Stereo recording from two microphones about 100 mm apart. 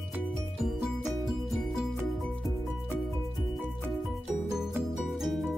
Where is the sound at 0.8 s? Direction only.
Centre (ahead or behind).